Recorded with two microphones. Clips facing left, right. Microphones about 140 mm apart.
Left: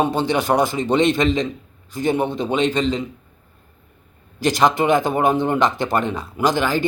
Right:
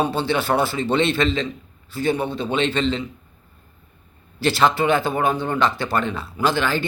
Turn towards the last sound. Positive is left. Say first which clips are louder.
# left 3 dB
turn(degrees=15)  # may be behind; listen again after turning